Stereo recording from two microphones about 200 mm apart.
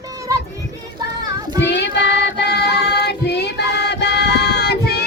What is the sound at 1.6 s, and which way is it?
Music, 60° left (ahead or behind).